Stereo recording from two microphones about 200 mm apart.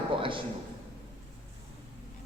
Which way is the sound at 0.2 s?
25° right (ahead or behind).